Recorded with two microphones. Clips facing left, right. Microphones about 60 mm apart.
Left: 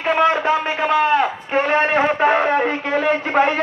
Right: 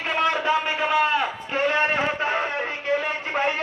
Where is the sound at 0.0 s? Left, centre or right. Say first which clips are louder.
Left 6 dB; left.